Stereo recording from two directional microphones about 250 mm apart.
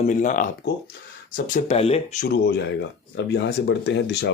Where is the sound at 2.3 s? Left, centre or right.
Left.